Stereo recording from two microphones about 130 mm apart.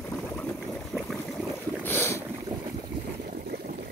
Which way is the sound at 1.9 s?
15° left (ahead or behind).